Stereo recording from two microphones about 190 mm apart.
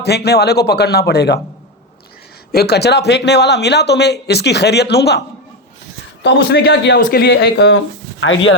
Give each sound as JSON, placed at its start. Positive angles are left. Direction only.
{"t": 0.0, "sound": "speech", "side_deg": 60}
{"t": 2.5, "sound": "speech", "side_deg": 55}
{"t": 6.2, "sound": "speech", "side_deg": 60}
{"t": 8.2, "sound": "speech", "side_deg": 85}